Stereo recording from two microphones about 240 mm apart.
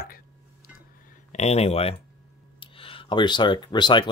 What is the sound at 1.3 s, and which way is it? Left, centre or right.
Speech, left.